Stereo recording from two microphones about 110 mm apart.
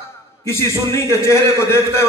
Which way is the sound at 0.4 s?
25° left (ahead or behind).